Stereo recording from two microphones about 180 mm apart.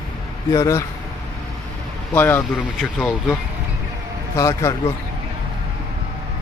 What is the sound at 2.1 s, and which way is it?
Speech, 10° left (ahead or behind).